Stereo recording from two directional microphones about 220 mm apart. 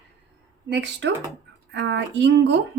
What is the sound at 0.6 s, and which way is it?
Speech, 55° right (ahead or behind).